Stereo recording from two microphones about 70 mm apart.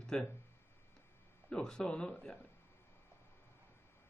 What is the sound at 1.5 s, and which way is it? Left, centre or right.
Speech, centre.